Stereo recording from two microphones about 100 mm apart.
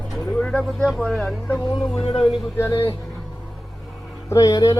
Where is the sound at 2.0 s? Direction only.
75° left (ahead or behind).